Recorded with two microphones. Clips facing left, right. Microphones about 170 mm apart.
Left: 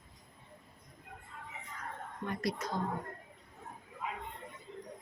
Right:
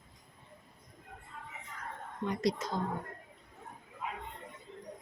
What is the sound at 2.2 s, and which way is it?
Speech, 20° right (ahead or behind).